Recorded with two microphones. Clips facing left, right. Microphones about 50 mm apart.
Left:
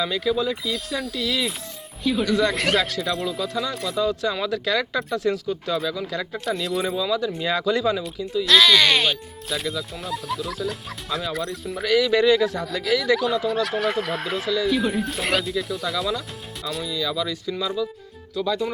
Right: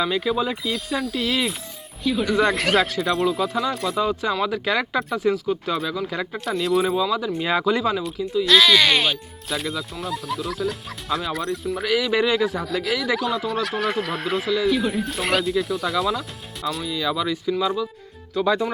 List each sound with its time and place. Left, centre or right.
0.0 s speech: centre
0.6 s speech: centre
4.0 s speech: centre
4.9 s speech: centre
5.9 s speech: right
6.3 s speech: centre
6.9 s speech: centre
8.4 s speech: centre
16.9 s speech: right
18.3 s speech: right